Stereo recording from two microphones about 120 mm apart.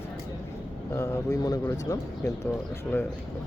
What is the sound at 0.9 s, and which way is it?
Speech, 25° left (ahead or behind).